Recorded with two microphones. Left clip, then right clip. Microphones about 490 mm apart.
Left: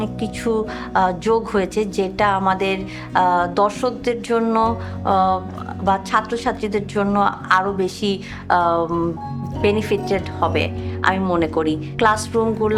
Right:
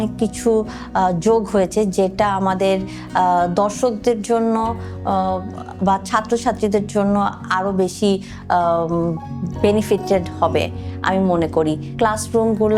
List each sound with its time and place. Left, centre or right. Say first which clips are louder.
0.0 s music: right 4 dB; right